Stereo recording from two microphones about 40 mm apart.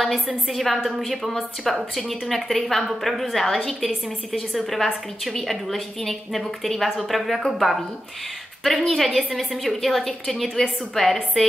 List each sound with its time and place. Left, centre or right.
0.5 s a woman's voice: centre